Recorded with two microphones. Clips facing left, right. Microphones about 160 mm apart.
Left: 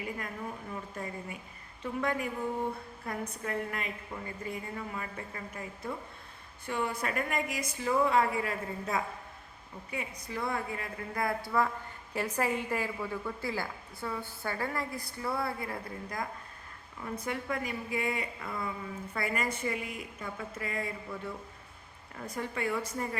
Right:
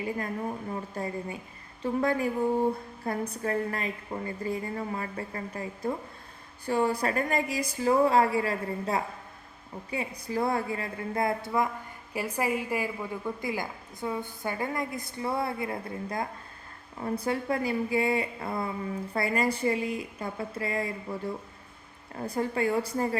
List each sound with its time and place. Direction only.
0.0 s a woman's voice: 35° right (ahead or behind)